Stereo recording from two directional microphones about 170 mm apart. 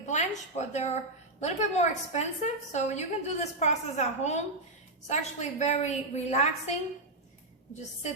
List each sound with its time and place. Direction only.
0.0 s a woman's voice: 40° left (ahead or behind)